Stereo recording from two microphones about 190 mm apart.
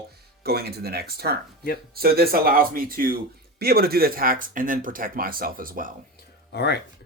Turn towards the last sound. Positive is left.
turn(degrees=60)  # may be behind; listen again after turning